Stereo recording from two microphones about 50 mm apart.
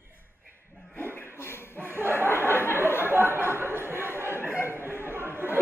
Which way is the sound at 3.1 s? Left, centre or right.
Right.